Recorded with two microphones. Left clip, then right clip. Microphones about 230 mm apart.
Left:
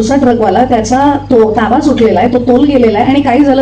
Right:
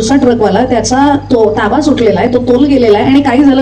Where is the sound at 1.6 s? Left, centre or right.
Right.